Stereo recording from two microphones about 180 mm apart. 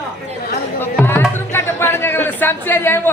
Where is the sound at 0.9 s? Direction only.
10° left (ahead or behind).